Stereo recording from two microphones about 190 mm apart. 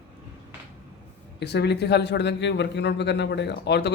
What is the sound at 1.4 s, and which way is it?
A man's voice, 60° left (ahead or behind).